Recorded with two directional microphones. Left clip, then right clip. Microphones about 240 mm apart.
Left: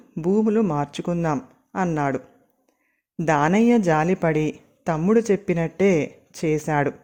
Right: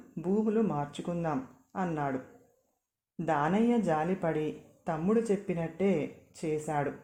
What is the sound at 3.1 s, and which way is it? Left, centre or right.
Speech, left.